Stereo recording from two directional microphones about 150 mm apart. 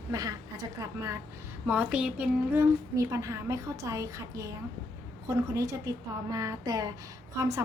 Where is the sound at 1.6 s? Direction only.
10° right (ahead or behind).